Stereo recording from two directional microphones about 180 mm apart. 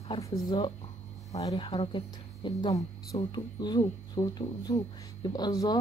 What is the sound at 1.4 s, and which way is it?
Speech, 25° left (ahead or behind).